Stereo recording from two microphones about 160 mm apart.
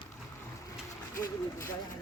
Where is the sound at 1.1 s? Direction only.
55° left (ahead or behind).